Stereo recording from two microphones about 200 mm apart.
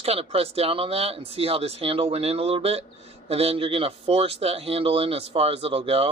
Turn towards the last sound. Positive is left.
turn(degrees=-30)  # may be behind; listen again after turning